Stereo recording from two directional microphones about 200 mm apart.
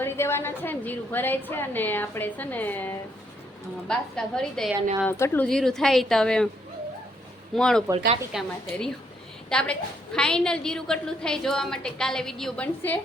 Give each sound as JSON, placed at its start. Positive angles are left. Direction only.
{"t": 0.0, "sound": "a woman's voice", "side_deg": 10}
{"t": 7.5, "sound": "a woman's voice", "side_deg": 5}
{"t": 7.9, "sound": "a woman's voice", "side_deg": -30}
{"t": 8.3, "sound": "a woman's voice", "side_deg": 0}